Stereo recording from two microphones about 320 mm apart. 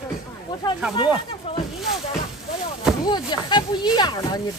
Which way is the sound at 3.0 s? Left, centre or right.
Centre.